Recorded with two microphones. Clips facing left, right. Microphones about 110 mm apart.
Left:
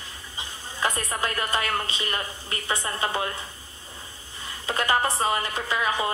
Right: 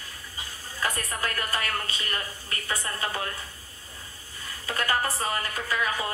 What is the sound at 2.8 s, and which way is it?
Speech, 25° left (ahead or behind).